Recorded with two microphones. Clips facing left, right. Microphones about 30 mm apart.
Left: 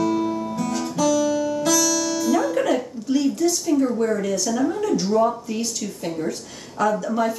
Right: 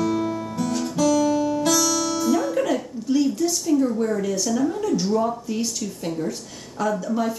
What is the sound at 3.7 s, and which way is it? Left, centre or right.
Speech, left.